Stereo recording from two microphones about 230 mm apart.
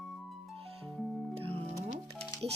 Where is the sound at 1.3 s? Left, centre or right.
Right.